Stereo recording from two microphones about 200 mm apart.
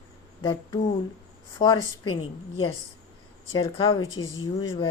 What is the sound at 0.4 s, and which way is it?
A woman's voice, 25° left (ahead or behind).